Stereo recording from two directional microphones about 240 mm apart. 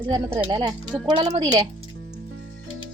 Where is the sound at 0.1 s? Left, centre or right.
Centre.